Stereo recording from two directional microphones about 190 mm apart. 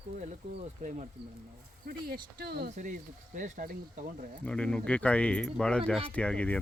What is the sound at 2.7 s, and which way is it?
Speech, 40° right (ahead or behind).